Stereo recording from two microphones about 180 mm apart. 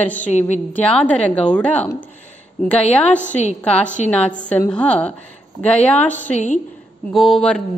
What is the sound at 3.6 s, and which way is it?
A woman's voice, 5° left (ahead or behind).